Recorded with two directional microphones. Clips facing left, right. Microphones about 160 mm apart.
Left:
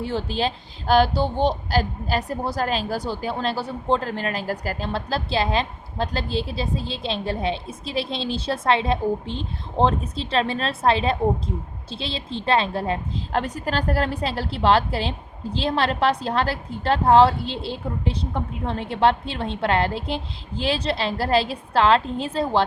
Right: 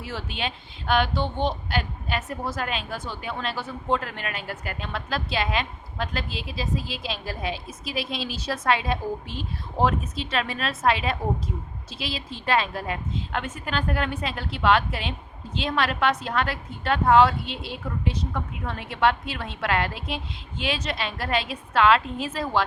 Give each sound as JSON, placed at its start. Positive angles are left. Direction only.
{"t": 0.0, "sound": "a woman's voice", "side_deg": 30}